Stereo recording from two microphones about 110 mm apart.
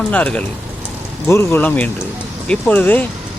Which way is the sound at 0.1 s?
15° left (ahead or behind).